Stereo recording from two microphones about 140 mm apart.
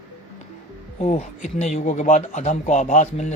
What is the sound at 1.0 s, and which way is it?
A man's voice, 50° left (ahead or behind).